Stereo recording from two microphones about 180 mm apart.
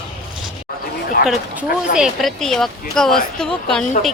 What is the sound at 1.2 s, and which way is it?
Speech, 55° left (ahead or behind).